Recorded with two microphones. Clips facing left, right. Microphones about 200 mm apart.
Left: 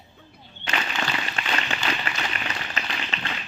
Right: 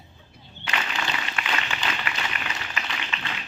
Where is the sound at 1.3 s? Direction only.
35° left (ahead or behind).